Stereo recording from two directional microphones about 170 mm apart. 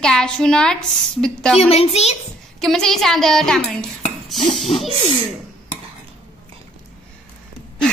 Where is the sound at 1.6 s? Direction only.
35° left (ahead or behind).